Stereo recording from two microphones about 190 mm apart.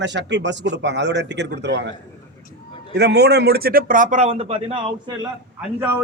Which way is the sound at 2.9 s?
60° right (ahead or behind).